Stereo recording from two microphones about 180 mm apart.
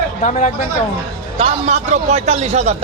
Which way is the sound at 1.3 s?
35° right (ahead or behind).